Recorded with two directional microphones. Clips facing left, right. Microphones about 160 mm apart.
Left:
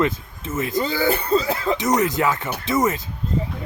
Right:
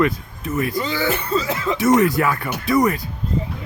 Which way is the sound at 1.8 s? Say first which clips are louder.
Right 7 dB; 20° left (ahead or behind).